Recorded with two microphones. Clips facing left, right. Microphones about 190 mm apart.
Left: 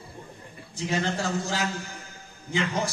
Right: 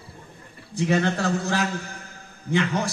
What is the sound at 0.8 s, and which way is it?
A man's voice, 60° right (ahead or behind).